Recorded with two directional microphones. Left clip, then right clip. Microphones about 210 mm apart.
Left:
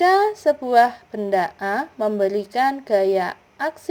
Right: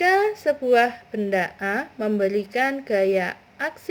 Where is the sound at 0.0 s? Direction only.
15° left (ahead or behind).